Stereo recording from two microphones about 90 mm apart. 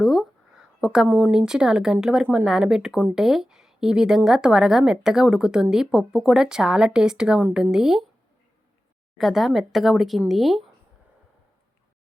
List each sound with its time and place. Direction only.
0.0 s a sound: 5° right (ahead or behind)
1.0 s speech: 20° right (ahead or behind)
1.3 s a woman's voice: 10° right (ahead or behind)
9.1 s a woman's voice: centre (ahead or behind)